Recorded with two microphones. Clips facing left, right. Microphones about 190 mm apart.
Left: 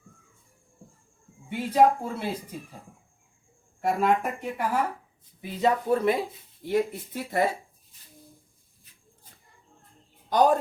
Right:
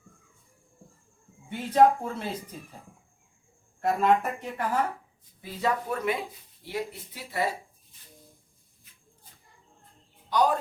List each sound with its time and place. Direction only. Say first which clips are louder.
1.5 s speech: even; 10° left (ahead or behind)
3.8 s speech: even; 10° left (ahead or behind)
5.4 s speech: left 4 dB; 20° left (ahead or behind)
6.7 s speech: left 8 dB; 50° left (ahead or behind)
10.2 s speech: left 3 dB; 45° left (ahead or behind)